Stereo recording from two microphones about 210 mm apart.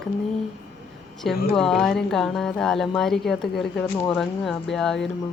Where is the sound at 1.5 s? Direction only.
Centre (ahead or behind).